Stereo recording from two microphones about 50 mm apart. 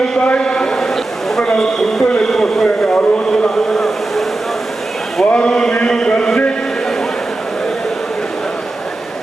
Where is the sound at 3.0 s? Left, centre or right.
Centre.